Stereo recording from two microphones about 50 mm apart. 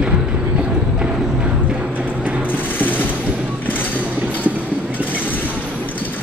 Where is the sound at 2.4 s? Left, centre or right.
Left.